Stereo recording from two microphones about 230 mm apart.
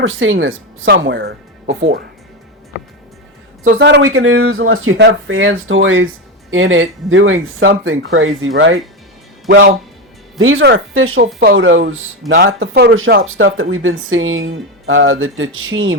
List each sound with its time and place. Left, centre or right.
0.0 s speech: right
3.7 s speech: right
9.5 s speech: right
10.3 s speech: right